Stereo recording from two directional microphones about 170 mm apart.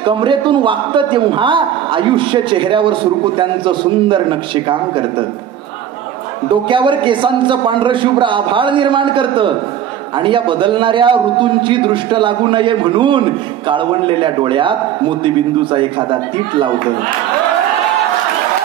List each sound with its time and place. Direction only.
0.0 s a man's voice: 30° right (ahead or behind)
6.5 s a man's voice: 30° right (ahead or behind)